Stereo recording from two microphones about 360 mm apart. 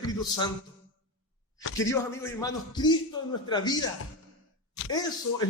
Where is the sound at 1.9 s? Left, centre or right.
Centre.